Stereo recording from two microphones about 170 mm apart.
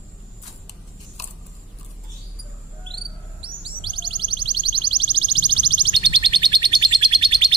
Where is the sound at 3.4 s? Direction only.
30° right (ahead or behind).